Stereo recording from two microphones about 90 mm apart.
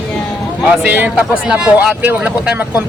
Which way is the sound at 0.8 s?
20° right (ahead or behind).